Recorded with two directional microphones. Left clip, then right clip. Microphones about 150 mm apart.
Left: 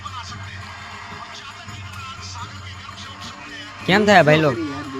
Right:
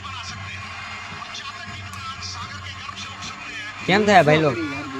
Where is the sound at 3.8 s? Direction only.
15° left (ahead or behind).